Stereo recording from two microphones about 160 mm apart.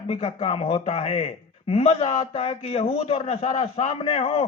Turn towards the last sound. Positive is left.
turn(degrees=35)  # may be behind; listen again after turning